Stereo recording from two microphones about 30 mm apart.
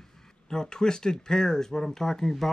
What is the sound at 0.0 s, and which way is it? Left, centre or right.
Speech, centre.